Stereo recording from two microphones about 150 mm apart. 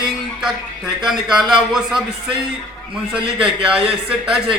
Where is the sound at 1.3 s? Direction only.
30° right (ahead or behind).